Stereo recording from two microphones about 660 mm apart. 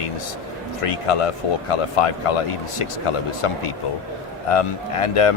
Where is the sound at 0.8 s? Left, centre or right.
Left.